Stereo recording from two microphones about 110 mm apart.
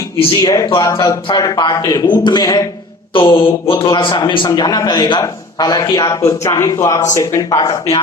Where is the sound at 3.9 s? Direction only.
45° left (ahead or behind).